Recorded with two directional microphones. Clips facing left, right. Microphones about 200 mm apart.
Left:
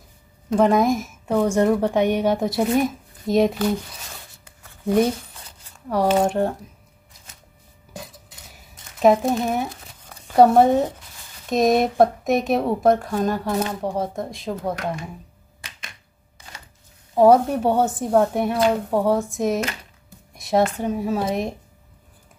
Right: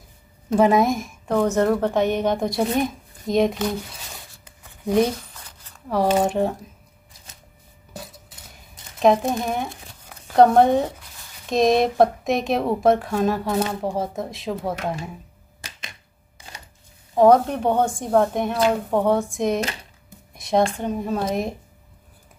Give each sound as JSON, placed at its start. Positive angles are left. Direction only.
{"t": 0.5, "sound": "a woman's voice", "side_deg": -5}
{"t": 4.5, "sound": "a sound", "side_deg": -15}
{"t": 5.9, "sound": "a woman's voice", "side_deg": 0}
{"t": 9.0, "sound": "a woman's voice", "side_deg": 5}
{"t": 9.8, "sound": "a sound", "side_deg": -5}
{"t": 10.3, "sound": "a woman's voice", "side_deg": 5}
{"t": 17.1, "sound": "a woman's voice", "side_deg": 5}